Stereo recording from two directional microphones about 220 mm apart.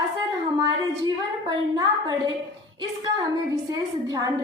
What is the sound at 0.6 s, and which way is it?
A woman's voice, 20° right (ahead or behind).